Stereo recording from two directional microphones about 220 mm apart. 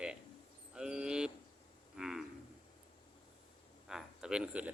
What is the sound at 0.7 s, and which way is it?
Cricket, 5° right (ahead or behind).